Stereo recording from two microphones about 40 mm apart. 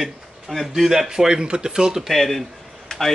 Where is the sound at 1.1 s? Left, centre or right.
Centre.